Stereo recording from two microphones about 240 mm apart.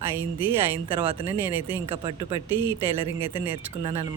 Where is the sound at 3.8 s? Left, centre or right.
Right.